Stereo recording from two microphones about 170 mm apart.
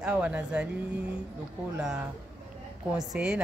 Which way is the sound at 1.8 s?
5° right (ahead or behind).